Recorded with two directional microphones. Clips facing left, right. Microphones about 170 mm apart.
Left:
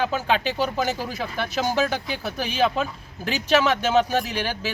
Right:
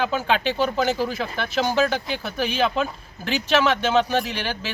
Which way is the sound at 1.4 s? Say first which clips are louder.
Right 1 dB; 40° left (ahead or behind).